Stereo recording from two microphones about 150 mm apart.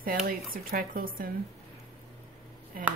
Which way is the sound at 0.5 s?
70° right (ahead or behind).